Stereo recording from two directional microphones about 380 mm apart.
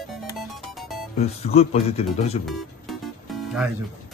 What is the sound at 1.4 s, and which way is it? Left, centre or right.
Speech, centre.